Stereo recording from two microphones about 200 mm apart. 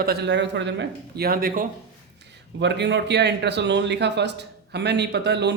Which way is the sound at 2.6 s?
60° right (ahead or behind).